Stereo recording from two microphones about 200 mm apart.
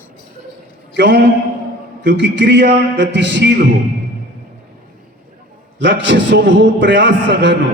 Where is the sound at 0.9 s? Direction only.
60° right (ahead or behind).